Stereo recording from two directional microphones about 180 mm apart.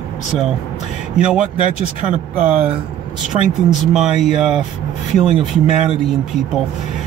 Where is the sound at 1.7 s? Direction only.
45° right (ahead or behind).